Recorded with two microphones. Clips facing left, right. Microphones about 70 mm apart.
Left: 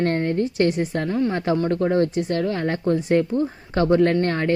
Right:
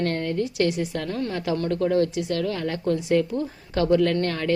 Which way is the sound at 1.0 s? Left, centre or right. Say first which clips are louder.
Left 6 dB; centre.